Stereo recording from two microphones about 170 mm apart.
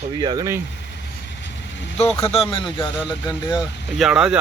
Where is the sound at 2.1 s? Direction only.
10° left (ahead or behind).